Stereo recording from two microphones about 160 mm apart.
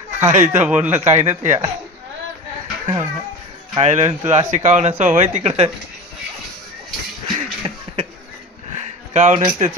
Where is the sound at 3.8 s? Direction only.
50° right (ahead or behind).